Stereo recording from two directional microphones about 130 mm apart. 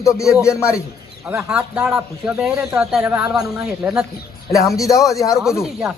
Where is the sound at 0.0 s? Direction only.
25° left (ahead or behind).